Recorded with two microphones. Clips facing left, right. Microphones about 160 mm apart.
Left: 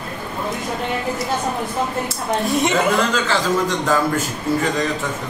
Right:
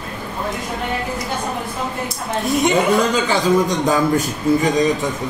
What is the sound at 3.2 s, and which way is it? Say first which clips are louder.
Speech: right 3 dB; 15° right (ahead or behind).